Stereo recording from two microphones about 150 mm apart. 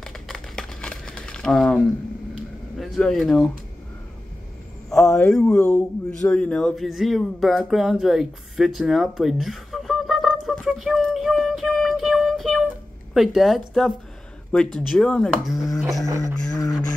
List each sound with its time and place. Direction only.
0.0 s crumpling: 5° left (ahead or behind)
2.8 s speech: centre (ahead or behind)
5.1 s speech: 5° left (ahead or behind)
16.1 s a sound: 20° right (ahead or behind)